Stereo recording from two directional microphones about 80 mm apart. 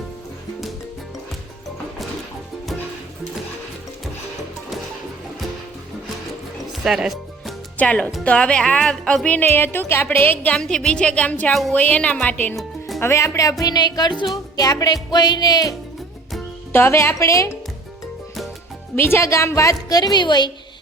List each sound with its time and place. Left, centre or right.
6.8 s music: centre
7.8 s a woman's voice: centre
10.5 s speech: centre
13.0 s a woman's voice: left
14.5 s music: left
15.1 s a woman's voice: left
16.7 s speech: left
18.9 s speech: left
19.9 s a woman's voice: left